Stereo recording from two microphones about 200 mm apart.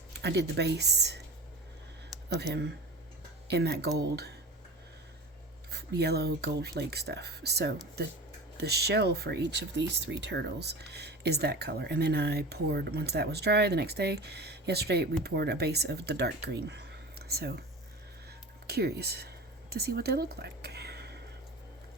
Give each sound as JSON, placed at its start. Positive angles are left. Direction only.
{"t": 0.1, "sound": "speech", "side_deg": -55}
{"t": 2.3, "sound": "speech", "side_deg": -60}
{"t": 5.7, "sound": "speech", "side_deg": -55}
{"t": 18.3, "sound": "a sound", "side_deg": -55}
{"t": 19.7, "sound": "speech", "side_deg": -50}